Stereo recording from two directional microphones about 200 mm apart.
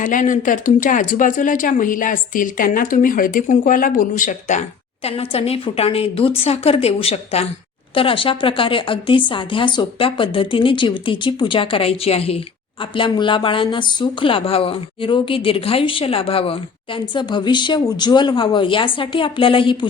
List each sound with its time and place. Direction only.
0.0 s a woman's voice: 40° left (ahead or behind); by 19.9 s 25° left (ahead or behind)